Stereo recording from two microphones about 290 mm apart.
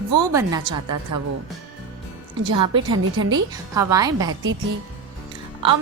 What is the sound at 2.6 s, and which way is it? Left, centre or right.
A woman's voice, centre.